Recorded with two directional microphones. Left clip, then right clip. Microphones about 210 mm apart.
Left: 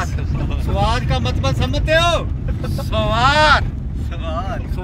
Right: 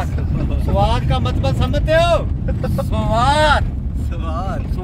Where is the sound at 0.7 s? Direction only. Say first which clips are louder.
Right 1 dB; 5° left (ahead or behind).